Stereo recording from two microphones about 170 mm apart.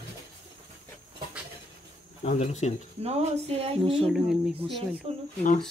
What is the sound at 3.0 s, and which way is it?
Speech, 40° right (ahead or behind).